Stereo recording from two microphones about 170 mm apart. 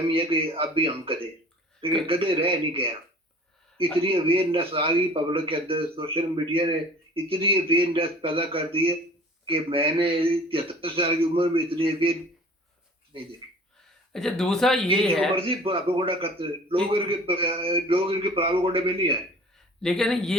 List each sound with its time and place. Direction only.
0.1 s a man's voice: 30° right (ahead or behind)
3.9 s a man's voice: 30° right (ahead or behind)
14.1 s speech: 5° left (ahead or behind)
15.4 s a man's voice: 30° right (ahead or behind)
19.8 s speech: 5° left (ahead or behind)